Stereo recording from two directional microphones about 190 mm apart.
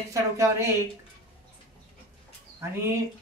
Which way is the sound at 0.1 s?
15° right (ahead or behind).